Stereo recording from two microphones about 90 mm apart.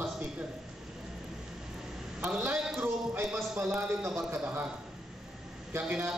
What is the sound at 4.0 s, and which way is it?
Speech, 35° right (ahead or behind).